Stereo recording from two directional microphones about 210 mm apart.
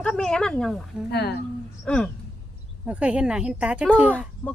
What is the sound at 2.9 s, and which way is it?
A woman's voice, 5° right (ahead or behind).